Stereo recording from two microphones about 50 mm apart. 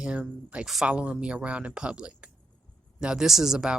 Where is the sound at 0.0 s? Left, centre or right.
Right.